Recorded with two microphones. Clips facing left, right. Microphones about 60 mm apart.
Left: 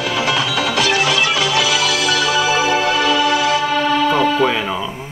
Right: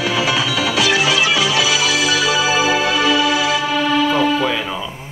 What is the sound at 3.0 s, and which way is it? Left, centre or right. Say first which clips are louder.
Music: left 1 dB; left.